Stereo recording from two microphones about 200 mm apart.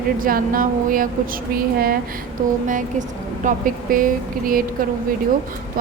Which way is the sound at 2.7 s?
40° right (ahead or behind).